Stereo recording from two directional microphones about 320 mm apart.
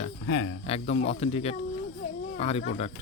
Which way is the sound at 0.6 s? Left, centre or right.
Centre.